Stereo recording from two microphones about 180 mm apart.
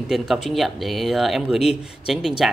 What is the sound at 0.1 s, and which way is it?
Speech, centre (ahead or behind).